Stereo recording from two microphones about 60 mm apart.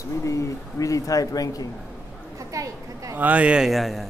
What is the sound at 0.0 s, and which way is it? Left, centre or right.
Speech, left.